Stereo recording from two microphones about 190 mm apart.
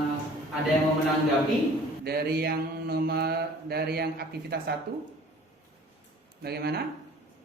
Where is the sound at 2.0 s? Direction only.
55° right (ahead or behind).